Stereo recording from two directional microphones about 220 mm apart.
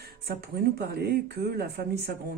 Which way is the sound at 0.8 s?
45° right (ahead or behind).